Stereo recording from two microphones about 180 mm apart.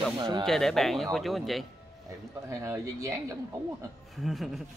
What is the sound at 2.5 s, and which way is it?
Speech, 15° right (ahead or behind).